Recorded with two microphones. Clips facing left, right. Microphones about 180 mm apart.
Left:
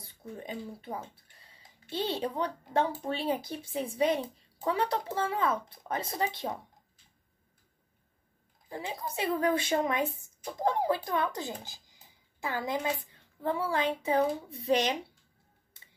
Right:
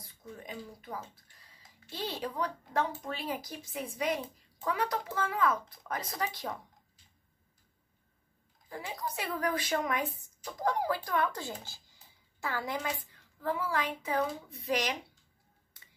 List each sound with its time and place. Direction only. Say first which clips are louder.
0.0 s a woman's voice: left 4 dB; 30° left (ahead or behind)
8.6 s a woman's voice: left 2 dB; 25° left (ahead or behind)